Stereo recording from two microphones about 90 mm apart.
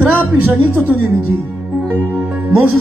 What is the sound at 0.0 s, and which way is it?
Speech, 25° right (ahead or behind).